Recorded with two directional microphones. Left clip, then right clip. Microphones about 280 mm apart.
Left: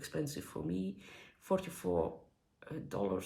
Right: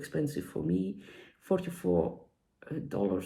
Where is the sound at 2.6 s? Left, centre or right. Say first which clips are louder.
Right 5 dB; centre.